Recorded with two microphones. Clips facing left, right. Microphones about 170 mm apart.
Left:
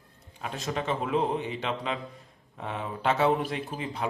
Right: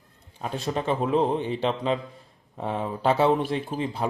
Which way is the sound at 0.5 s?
35° right (ahead or behind).